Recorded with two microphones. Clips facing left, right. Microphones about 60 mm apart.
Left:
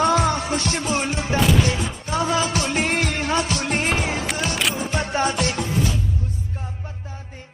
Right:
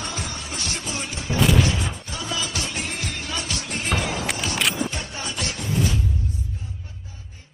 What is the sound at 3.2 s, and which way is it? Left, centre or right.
Music, left.